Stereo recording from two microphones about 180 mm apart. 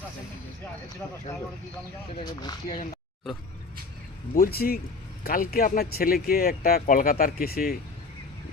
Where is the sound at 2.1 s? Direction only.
25° left (ahead or behind).